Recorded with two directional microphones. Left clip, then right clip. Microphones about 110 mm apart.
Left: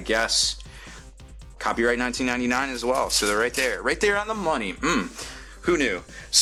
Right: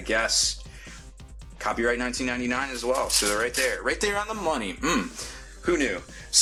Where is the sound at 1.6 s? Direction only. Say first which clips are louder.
Left 2 dB; 35° left (ahead or behind).